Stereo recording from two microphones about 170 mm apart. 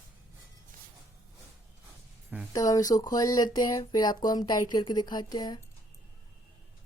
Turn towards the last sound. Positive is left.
turn(degrees=25)  # may be behind; listen again after turning